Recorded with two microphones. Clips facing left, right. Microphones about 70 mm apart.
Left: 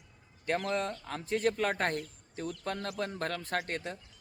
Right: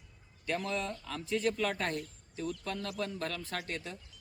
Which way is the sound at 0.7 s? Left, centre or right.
Left.